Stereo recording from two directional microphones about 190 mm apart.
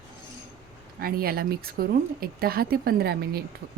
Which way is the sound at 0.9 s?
50° right (ahead or behind).